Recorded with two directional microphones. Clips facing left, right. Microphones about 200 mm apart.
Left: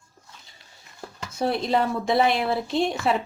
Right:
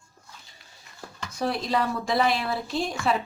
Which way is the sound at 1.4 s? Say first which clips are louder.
Left 3 dB; 25° left (ahead or behind).